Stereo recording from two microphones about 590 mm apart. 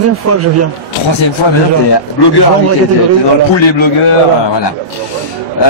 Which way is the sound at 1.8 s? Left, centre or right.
Left.